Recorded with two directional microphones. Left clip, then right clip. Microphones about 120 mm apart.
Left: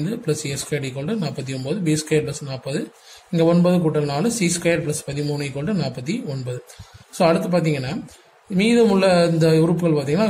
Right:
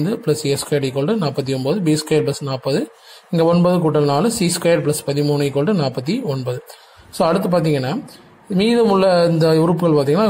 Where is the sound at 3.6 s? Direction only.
45° right (ahead or behind).